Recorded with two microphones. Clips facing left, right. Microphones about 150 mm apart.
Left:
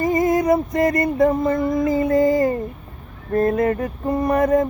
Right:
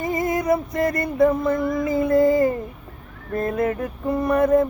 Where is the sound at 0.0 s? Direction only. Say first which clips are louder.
Left 5 dB; 45° left (ahead or behind).